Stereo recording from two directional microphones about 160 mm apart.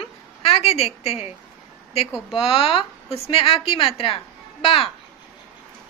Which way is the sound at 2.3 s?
35° left (ahead or behind).